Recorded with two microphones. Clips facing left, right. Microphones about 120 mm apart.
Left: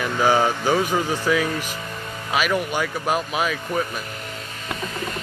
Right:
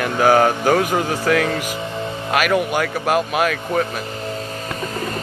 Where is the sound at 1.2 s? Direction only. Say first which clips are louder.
Right 4 dB; 85° right.